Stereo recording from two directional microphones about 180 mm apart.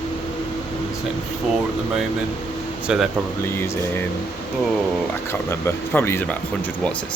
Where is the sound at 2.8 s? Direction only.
5° right (ahead or behind).